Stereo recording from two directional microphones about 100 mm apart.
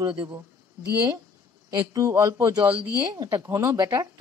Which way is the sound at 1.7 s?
35° right (ahead or behind).